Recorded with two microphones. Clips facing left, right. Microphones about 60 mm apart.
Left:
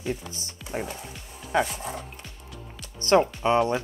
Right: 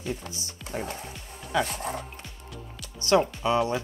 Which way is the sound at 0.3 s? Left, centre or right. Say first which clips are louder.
Even; left.